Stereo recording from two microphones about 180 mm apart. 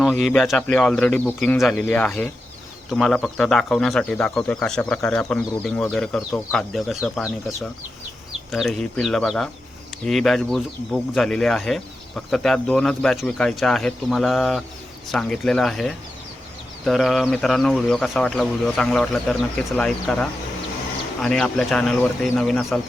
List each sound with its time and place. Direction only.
0.0 s speech: centre (ahead or behind)